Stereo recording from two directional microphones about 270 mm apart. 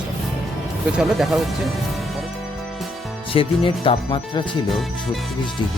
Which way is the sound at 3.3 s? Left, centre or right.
Centre.